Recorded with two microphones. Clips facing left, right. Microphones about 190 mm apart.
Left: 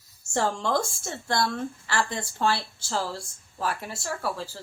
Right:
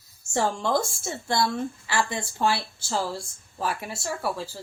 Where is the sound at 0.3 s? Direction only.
10° right (ahead or behind).